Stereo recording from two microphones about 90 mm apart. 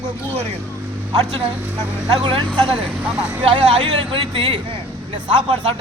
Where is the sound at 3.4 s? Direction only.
90° right.